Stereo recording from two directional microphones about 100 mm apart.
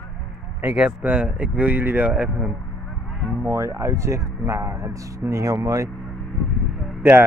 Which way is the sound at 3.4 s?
30° right (ahead or behind).